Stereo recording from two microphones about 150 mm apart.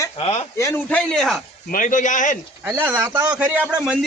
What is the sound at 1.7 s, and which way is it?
Speech, 60° left (ahead or behind).